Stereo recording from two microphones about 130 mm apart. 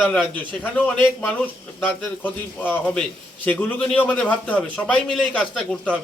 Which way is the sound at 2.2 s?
15° left (ahead or behind).